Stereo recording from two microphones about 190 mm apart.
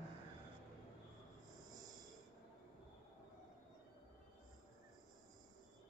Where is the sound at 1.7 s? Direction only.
20° right (ahead or behind).